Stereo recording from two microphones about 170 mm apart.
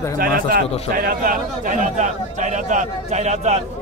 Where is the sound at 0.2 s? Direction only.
60° right (ahead or behind).